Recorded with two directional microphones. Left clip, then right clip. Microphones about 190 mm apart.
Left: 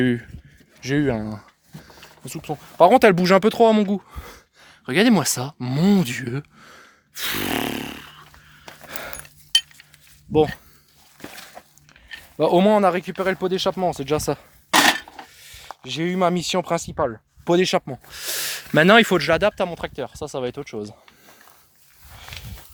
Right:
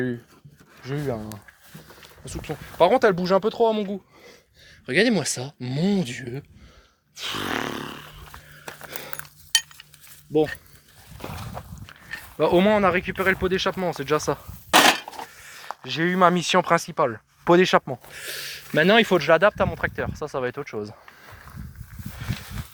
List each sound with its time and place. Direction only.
0.9 s speech: 85° left
2.2 s speech: 45° left (ahead or behind)
2.9 s speech: 70° left (ahead or behind)
4.9 s speech: 35° left (ahead or behind)
7.2 s a sound: 50° left (ahead or behind)
8.9 s dog: 50° left (ahead or behind)
10.3 s speech: 50° left (ahead or behind)
12.4 s speech: 40° left (ahead or behind)
15.8 s speech: 15° left (ahead or behind)
16.9 s speech: 5° right (ahead or behind)
17.4 s speech: 10° left (ahead or behind)
18.2 s speech: 50° left (ahead or behind); by 20.9 s 25° left (ahead or behind)